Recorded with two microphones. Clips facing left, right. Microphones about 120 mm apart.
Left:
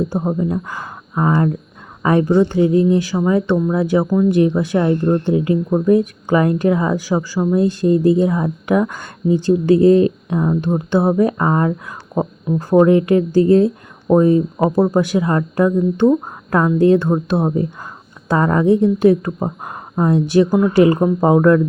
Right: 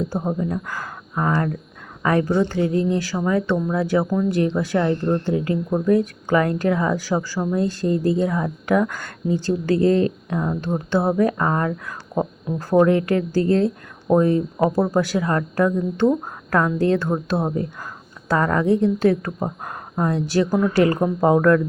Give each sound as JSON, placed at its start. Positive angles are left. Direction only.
{"t": 0.1, "sound": "a woman's voice", "side_deg": 20}